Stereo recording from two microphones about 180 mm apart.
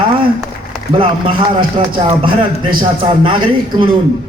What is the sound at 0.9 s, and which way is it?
Speech, 30° right (ahead or behind).